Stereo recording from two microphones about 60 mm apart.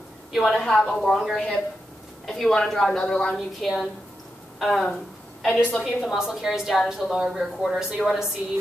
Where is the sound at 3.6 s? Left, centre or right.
Centre.